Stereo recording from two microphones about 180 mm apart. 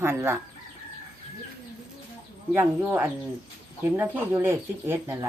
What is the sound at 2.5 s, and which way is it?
Speech, 10° right (ahead or behind).